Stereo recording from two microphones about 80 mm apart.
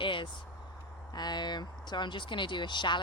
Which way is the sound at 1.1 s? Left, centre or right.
Left.